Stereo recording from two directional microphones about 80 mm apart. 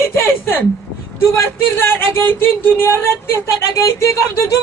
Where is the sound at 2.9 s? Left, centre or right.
Left.